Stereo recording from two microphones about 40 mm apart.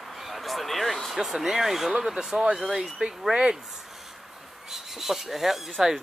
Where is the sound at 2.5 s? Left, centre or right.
Centre.